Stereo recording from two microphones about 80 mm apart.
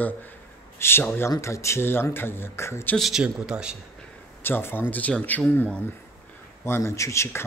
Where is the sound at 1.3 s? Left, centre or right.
Left.